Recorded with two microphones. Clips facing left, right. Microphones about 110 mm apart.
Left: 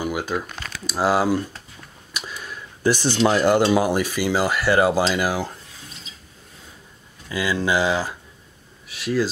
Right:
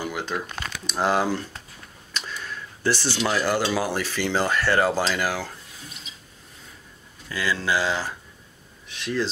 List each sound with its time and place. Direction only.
0.0 s speech: 10° left (ahead or behind)
2.1 s a sound: 10° left (ahead or behind)
3.3 s speech: 20° left (ahead or behind)
7.2 s speech: 15° left (ahead or behind)